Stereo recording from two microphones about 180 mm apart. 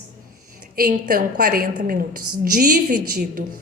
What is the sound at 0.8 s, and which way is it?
A woman's voice, 55° right (ahead or behind).